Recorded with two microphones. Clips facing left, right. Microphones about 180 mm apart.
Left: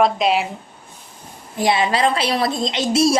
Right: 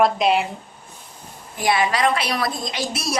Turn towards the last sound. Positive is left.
turn(degrees=25)  # may be behind; listen again after turning